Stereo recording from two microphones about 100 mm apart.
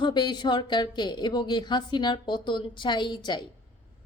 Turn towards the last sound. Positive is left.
turn(degrees=45)  # may be behind; listen again after turning